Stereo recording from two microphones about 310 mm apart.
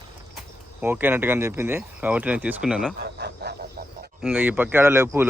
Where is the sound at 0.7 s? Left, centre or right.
Centre.